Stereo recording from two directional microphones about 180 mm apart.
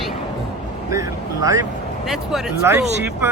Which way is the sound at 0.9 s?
20° right (ahead or behind).